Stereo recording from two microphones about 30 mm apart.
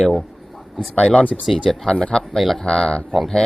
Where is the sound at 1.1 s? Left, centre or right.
Left.